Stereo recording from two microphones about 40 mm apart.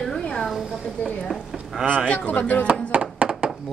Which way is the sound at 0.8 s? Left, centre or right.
Centre.